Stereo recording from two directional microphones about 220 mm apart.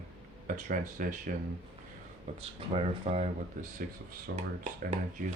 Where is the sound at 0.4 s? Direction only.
40° right (ahead or behind).